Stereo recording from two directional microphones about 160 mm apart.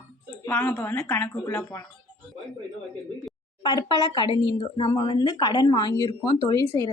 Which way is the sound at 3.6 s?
25° left (ahead or behind).